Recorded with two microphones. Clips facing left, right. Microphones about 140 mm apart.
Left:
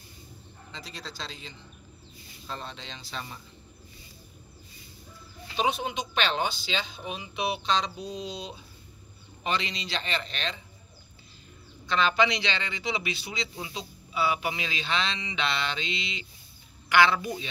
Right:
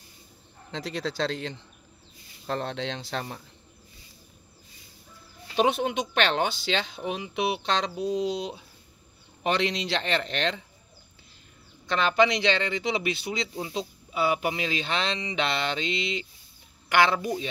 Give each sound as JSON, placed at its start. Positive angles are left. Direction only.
{"t": 0.7, "sound": "a man's voice", "side_deg": -90}
{"t": 2.4, "sound": "speech", "side_deg": -75}
{"t": 5.6, "sound": "speech", "side_deg": -65}
{"t": 11.9, "sound": "speech", "side_deg": -55}